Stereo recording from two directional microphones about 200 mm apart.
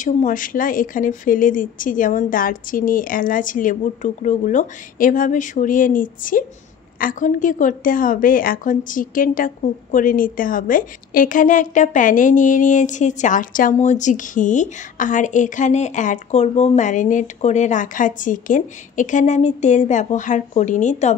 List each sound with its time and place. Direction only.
0.0 s a woman's voice: 40° left (ahead or behind)